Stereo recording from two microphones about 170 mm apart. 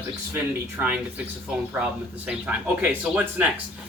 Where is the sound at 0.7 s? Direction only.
10° right (ahead or behind).